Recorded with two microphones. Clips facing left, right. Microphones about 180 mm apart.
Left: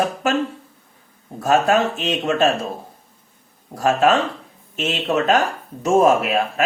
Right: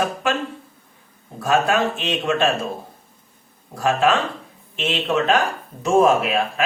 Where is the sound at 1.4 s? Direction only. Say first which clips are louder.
Left 2 dB; 40° left (ahead or behind).